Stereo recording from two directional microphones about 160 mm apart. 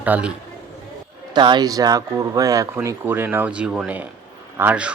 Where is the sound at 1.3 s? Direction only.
30° right (ahead or behind).